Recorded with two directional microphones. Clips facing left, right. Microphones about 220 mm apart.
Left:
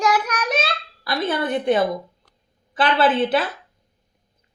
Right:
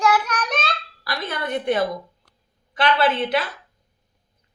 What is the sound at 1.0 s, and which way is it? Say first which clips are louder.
Speech: left 6 dB; 30° left (ahead or behind).